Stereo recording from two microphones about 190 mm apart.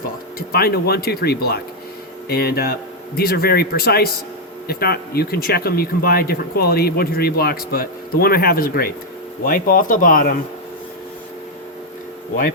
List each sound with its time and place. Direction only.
0.3 s speech: 55° left (ahead or behind)